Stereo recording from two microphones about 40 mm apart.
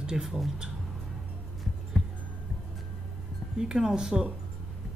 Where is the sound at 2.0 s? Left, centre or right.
Centre.